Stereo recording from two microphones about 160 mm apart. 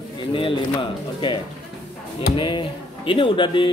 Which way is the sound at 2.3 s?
30° left (ahead or behind).